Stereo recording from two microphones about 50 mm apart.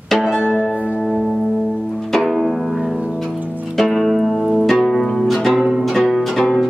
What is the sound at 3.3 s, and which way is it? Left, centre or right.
Music, right.